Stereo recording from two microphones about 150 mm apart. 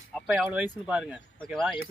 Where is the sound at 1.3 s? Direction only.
5° left (ahead or behind).